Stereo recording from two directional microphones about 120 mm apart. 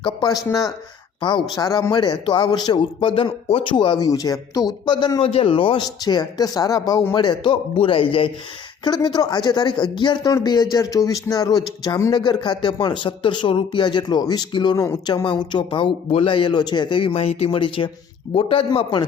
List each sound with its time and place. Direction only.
0.0 s speech: 35° left (ahead or behind)
1.2 s speech: 40° left (ahead or behind)
1.5 s speech: 30° left (ahead or behind); by 8.3 s 45° left (ahead or behind)
8.8 s speech: 35° left (ahead or behind)
16.0 s speech: 50° left (ahead or behind)